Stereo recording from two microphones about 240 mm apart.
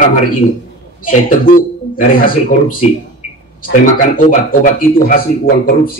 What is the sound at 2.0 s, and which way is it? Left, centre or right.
Speech, left.